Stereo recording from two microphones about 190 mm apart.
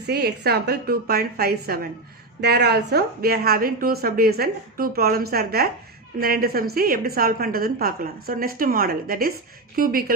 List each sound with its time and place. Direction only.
0.1 s a woman's voice: 55° right (ahead or behind)